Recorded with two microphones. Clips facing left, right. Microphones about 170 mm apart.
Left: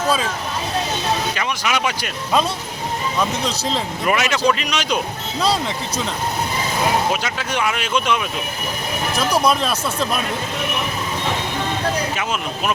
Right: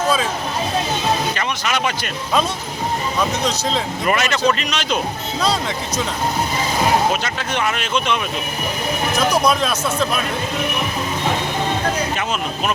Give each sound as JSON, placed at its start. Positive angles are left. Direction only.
{"t": 1.4, "sound": "speech", "side_deg": 5}
{"t": 4.0, "sound": "speech", "side_deg": 5}
{"t": 7.1, "sound": "speech", "side_deg": 5}